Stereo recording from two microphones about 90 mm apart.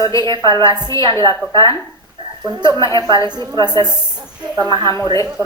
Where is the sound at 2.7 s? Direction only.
35° left (ahead or behind).